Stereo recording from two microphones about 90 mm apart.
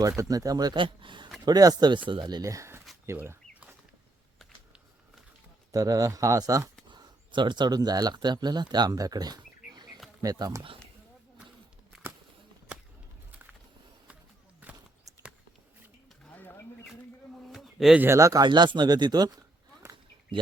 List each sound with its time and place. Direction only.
0.2 s speech: 40° right (ahead or behind)
0.8 s speech: 65° right (ahead or behind)
1.5 s speech: 45° right (ahead or behind)
5.7 s speech: 40° right (ahead or behind)
6.8 s speech: 60° right (ahead or behind); by 10.4 s 45° right (ahead or behind)
16.3 s a sound: 20° left (ahead or behind)
17.5 s a sound: 5° right (ahead or behind)
17.9 s speech: 25° right (ahead or behind)
18.2 s speech: 35° right (ahead or behind)
18.4 s speech: 55° right (ahead or behind)